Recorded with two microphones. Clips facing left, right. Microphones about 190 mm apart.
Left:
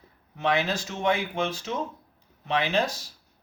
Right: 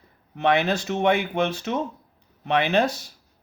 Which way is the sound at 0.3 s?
60° right (ahead or behind).